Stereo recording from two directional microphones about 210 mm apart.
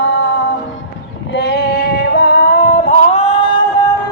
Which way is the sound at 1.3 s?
50° left (ahead or behind).